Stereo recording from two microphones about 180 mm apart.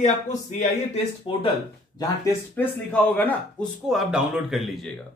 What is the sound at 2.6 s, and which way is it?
Speech, 10° left (ahead or behind).